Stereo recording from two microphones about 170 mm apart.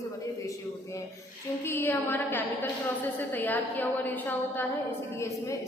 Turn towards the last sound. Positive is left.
turn(degrees=10)  # may be behind; listen again after turning